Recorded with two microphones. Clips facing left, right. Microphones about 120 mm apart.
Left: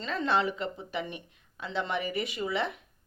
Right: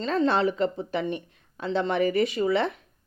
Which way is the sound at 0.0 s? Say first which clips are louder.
Right 5 dB; 35° right (ahead or behind).